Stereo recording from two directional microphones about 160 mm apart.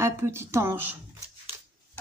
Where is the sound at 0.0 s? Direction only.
15° right (ahead or behind).